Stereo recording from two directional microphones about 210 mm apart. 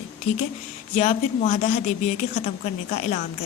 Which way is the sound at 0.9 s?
35° left (ahead or behind).